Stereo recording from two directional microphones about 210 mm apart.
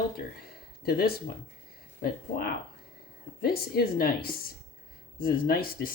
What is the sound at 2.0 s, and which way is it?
Speech, 45° left (ahead or behind).